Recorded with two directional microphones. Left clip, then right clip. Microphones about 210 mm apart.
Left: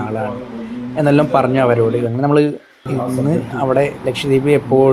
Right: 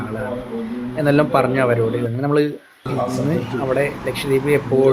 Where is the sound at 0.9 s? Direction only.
15° left (ahead or behind).